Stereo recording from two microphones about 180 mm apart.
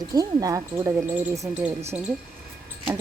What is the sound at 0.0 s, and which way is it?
Speech, 20° right (ahead or behind).